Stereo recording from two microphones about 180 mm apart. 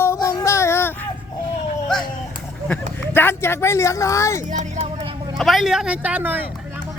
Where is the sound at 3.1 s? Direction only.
15° left (ahead or behind).